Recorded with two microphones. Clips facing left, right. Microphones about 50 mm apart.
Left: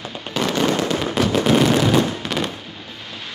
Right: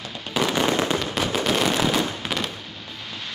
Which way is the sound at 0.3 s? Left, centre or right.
Centre.